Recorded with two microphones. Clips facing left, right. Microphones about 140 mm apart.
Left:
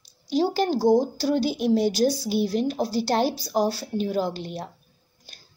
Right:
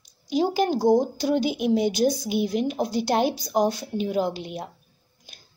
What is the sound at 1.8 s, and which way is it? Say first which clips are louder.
Speech: even; 35° left (ahead or behind).